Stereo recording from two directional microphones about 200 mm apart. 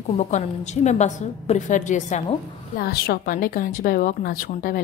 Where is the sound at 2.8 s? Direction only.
50° left (ahead or behind).